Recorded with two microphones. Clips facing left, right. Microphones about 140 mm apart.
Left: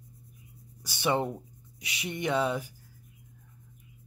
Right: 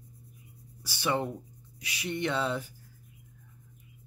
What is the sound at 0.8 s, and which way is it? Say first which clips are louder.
Speech: left 2 dB; 20° left (ahead or behind).